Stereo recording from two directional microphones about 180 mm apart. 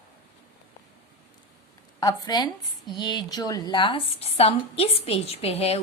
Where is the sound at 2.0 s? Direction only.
20° left (ahead or behind).